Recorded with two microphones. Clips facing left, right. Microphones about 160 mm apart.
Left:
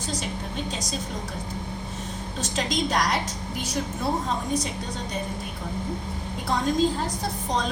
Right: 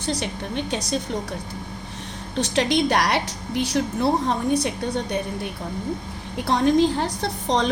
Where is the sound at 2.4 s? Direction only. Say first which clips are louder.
Right 7 dB; 65° right (ahead or behind).